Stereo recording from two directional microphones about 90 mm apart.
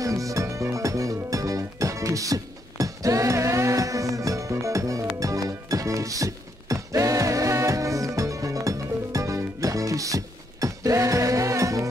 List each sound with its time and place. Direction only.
0.0 s music: 40° right (ahead or behind)